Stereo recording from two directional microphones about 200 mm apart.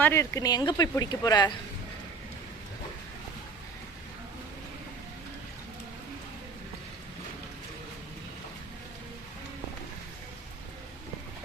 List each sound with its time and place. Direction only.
0.0 s speech: 15° left (ahead or behind)